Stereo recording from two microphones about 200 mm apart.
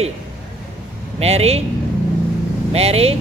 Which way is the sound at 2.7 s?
30° right (ahead or behind).